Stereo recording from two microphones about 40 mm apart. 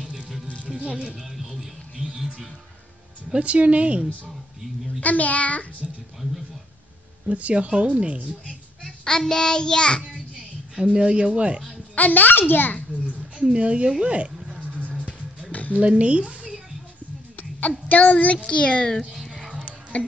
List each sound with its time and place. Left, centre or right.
0.7 s music: right
1.0 s speech: centre
2.0 s music: centre
3.3 s speech: right
5.0 s a child's voice: left
7.2 s speech: right
9.0 s child singing: centre
10.1 s music: centre
11.9 s a child's voice: left
13.0 s a sound: right
15.5 s a sound: left
15.8 s speech: right
17.6 s a child's voice: left
18.5 s a child's voice: left